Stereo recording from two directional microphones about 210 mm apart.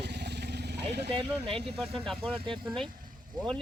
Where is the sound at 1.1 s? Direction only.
25° right (ahead or behind).